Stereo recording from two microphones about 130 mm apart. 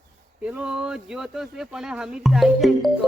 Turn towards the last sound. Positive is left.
turn(degrees=0)  # may be behind; listen again after turning